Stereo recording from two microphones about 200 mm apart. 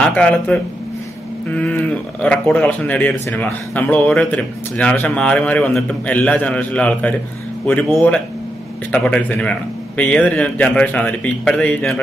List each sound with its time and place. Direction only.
0.0 s speech: 5° left (ahead or behind)